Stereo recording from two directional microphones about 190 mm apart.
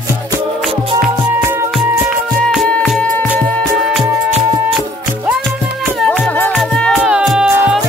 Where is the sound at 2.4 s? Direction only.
Centre (ahead or behind).